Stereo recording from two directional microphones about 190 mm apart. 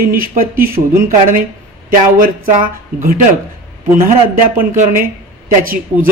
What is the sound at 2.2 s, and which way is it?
Speech, 50° right (ahead or behind).